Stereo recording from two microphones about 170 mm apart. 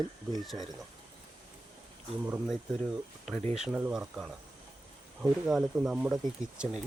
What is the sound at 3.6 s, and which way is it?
Speech, 5° right (ahead or behind).